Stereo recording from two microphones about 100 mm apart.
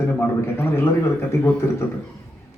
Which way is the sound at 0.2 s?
20° left (ahead or behind).